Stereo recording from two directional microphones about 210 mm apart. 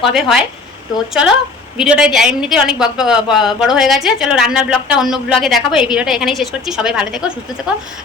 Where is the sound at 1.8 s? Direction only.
5° right (ahead or behind).